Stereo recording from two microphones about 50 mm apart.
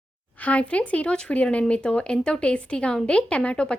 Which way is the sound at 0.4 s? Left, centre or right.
Left.